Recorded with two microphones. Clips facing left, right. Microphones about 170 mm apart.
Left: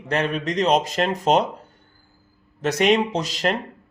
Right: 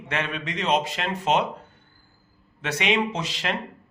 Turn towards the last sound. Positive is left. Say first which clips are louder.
# left 5 dB
turn(degrees=40)  # may be behind; listen again after turning